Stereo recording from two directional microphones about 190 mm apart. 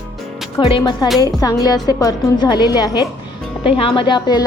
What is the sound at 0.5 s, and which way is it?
A woman's voice, 25° left (ahead or behind).